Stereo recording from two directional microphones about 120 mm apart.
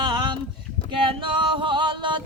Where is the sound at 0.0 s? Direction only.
40° right (ahead or behind).